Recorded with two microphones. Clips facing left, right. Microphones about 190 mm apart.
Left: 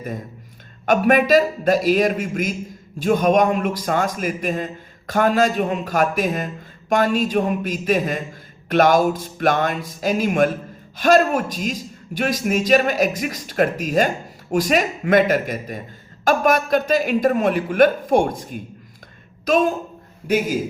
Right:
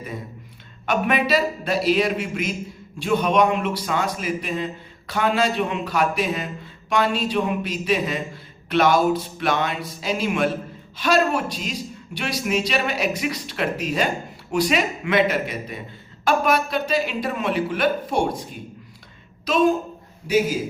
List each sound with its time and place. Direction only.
0.9 s a man's voice: 45° left (ahead or behind)